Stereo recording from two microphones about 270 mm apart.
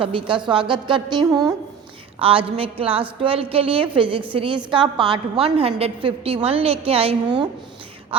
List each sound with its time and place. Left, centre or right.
0.0 s a woman's voice: centre